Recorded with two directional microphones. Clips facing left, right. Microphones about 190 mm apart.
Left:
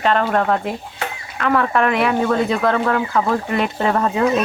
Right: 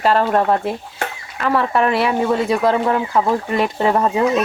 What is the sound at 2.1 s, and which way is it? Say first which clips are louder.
Speech: even; 15° right (ahead or behind).